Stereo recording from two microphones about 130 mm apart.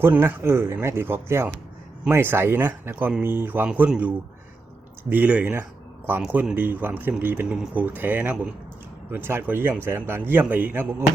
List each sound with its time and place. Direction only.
0.0 s speech: 15° right (ahead or behind)